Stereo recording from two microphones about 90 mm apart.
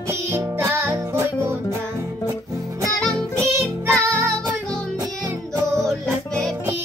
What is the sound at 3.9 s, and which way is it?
Music, 10° left (ahead or behind).